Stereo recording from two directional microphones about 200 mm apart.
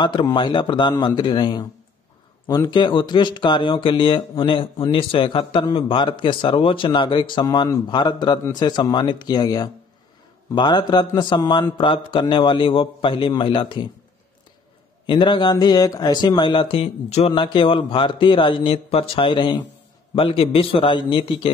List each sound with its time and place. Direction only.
0.0 s speech: 20° left (ahead or behind)
15.0 s speech: 25° left (ahead or behind)